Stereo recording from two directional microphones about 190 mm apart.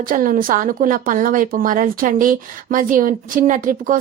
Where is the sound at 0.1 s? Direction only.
45° right (ahead or behind).